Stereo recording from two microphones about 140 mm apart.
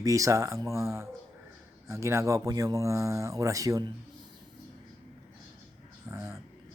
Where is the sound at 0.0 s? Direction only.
25° right (ahead or behind).